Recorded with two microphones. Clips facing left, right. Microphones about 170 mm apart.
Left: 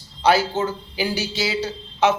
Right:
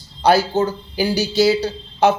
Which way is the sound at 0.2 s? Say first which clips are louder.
Right 3 dB; 40° right (ahead or behind).